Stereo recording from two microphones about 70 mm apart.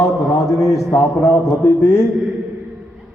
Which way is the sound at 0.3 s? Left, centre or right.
Left.